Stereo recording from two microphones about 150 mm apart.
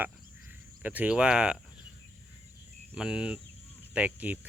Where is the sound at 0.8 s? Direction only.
10° right (ahead or behind).